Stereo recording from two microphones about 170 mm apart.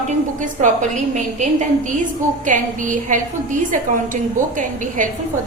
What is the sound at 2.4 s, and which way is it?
A woman's voice, 50° right (ahead or behind).